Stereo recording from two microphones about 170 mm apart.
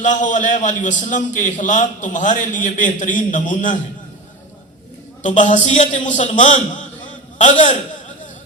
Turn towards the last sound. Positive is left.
turn(degrees=45)  # may be behind; listen again after turning